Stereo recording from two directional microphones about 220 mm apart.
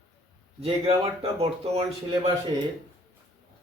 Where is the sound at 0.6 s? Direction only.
25° right (ahead or behind).